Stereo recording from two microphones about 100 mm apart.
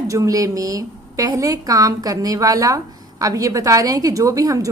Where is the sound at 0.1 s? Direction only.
35° right (ahead or behind).